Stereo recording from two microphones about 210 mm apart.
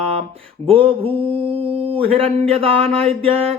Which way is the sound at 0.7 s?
25° right (ahead or behind).